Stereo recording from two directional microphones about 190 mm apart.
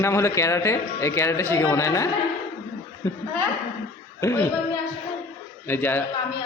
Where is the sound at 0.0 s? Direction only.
15° left (ahead or behind).